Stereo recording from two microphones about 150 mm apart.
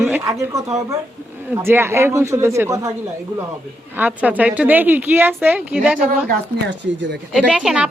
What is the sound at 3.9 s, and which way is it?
Speech, 10° right (ahead or behind).